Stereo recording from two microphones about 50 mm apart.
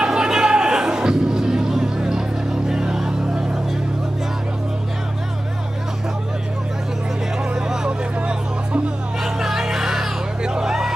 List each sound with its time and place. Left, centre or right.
0.0 s music: centre
7.5 s a sound: centre
9.2 s music: centre